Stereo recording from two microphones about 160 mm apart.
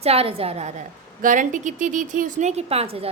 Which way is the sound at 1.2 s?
55° right (ahead or behind).